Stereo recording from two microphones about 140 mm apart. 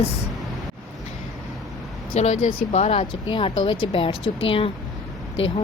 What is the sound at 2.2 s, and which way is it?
A woman's voice, 55° left (ahead or behind).